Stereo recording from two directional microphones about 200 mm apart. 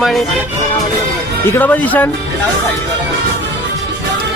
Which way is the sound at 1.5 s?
10° left (ahead or behind).